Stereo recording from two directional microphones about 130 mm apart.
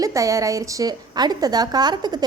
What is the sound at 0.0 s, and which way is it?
A woman's voice, 25° right (ahead or behind).